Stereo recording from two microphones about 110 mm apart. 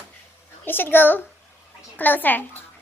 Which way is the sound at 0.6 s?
20° left (ahead or behind).